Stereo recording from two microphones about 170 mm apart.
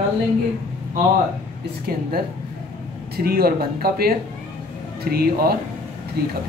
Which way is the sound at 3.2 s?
65° right (ahead or behind).